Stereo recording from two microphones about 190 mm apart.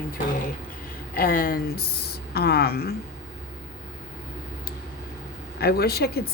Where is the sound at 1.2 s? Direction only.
50° left (ahead or behind).